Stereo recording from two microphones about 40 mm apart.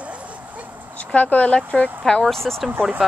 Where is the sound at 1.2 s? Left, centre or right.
Left.